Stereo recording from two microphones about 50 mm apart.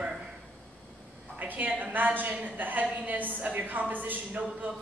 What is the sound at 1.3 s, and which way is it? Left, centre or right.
A woman's voice, right.